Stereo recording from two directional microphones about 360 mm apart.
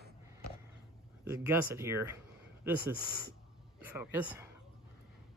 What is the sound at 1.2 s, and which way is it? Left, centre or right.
Speech, centre.